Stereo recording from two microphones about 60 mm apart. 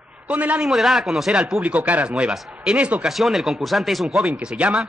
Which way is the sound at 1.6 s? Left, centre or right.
Right.